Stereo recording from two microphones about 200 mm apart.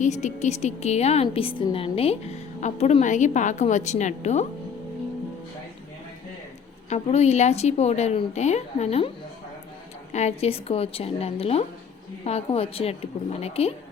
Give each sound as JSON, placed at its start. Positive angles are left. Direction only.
{"t": 0.0, "sound": "a woman's voice", "side_deg": 35}
{"t": 6.9, "sound": "a woman's voice", "side_deg": 35}
{"t": 10.1, "sound": "a woman's voice", "side_deg": 35}